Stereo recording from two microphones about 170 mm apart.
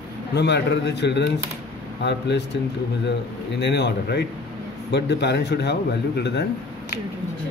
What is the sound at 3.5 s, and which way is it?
A man's voice, 80° left.